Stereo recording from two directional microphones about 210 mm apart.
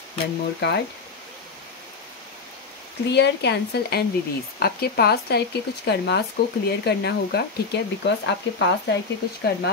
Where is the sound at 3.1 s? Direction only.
55° left (ahead or behind).